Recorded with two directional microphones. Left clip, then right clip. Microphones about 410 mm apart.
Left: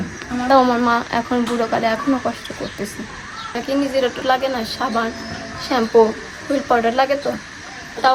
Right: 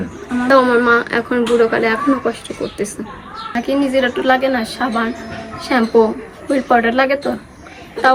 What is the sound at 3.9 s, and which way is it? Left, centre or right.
A woman's voice, centre.